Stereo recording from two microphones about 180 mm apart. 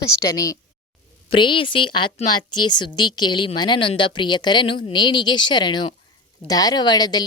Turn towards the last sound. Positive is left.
turn(degrees=20)  # may be behind; listen again after turning